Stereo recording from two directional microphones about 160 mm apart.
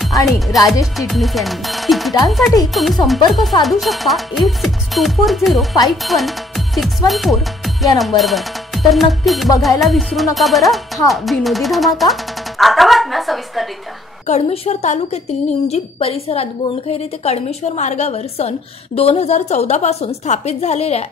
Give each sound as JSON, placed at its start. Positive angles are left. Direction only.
{"t": 0.0, "sound": "speech", "side_deg": 0}
{"t": 8.2, "sound": "music", "side_deg": 0}
{"t": 9.2, "sound": "speech", "side_deg": 0}
{"t": 14.2, "sound": "a woman's voice", "side_deg": 40}